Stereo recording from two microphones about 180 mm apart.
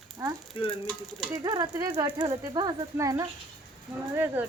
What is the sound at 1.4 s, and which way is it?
Speech, 20° right (ahead or behind).